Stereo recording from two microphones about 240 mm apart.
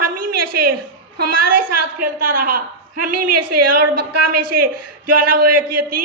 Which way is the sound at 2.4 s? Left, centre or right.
Right.